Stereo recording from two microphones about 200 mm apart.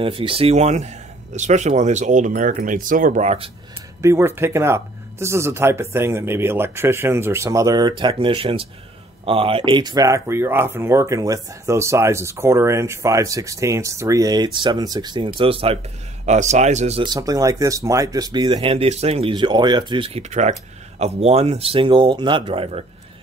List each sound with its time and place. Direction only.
0.0 s speech: 25° right (ahead or behind)
4.0 s speech: 15° right (ahead or behind); by 22.8 s 30° right (ahead or behind)